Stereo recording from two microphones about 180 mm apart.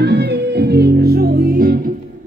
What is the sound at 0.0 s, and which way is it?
Music, 70° right (ahead or behind).